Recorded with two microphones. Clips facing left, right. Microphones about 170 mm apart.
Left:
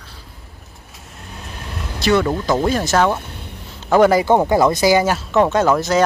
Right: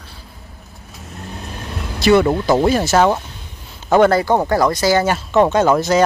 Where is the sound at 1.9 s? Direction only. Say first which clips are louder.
Right 4 dB; 10° right (ahead or behind).